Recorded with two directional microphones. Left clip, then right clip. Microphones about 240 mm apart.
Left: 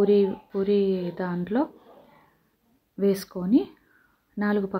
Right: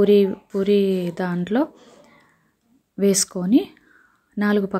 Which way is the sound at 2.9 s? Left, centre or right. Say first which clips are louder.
Right 5 dB; right.